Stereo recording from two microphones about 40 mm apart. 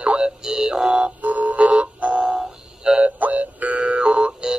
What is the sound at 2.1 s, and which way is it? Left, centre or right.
Music, centre.